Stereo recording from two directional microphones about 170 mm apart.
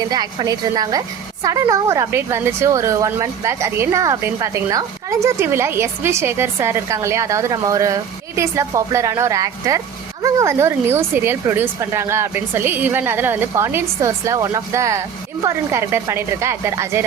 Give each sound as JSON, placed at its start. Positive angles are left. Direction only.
{"t": 0.1, "sound": "a woman's voice", "side_deg": -25}